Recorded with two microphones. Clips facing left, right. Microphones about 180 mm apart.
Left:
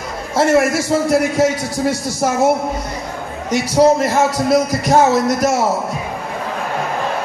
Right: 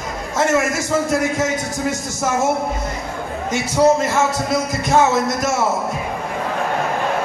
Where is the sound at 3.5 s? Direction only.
35° left (ahead or behind).